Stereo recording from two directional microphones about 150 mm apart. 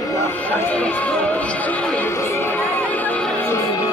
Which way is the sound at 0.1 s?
15° left (ahead or behind).